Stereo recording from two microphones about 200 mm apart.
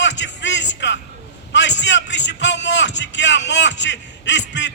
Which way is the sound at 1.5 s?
65° left (ahead or behind).